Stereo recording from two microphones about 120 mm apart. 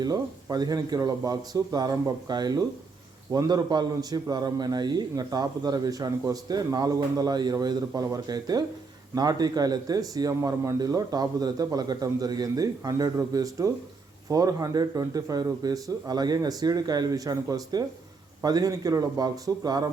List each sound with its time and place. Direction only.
0.0 s a man's voice: 30° right (ahead or behind)